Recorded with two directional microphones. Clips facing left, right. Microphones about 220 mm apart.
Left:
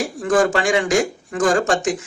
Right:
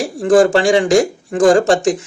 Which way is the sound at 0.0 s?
30° right (ahead or behind).